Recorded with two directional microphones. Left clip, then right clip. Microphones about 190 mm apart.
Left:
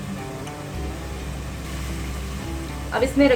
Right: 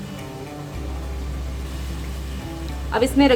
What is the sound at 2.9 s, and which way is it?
Music, 50° right (ahead or behind).